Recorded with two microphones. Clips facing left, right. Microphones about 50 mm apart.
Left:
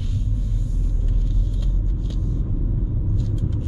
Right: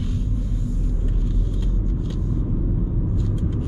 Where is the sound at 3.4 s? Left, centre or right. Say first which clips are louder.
Right 2 dB; centre.